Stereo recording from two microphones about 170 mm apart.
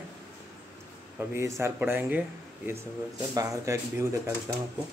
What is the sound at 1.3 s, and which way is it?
Speech, 15° right (ahead or behind).